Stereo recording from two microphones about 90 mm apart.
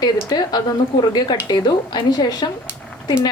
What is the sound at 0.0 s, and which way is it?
A woman's voice, 50° left (ahead or behind).